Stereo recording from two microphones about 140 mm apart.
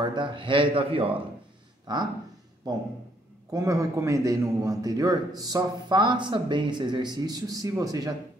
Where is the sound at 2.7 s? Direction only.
25° right (ahead or behind).